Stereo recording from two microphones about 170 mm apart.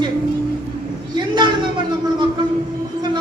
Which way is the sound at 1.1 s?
25° right (ahead or behind).